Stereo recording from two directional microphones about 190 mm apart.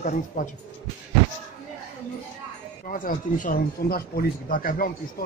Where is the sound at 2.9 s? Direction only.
45° left (ahead or behind).